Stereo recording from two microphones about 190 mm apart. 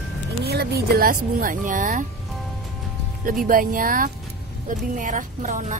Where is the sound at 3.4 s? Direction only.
45° right (ahead or behind).